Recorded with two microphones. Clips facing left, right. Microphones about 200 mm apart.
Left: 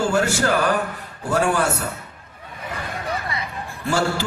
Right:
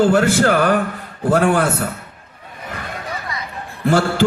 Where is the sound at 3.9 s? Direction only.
55° right (ahead or behind).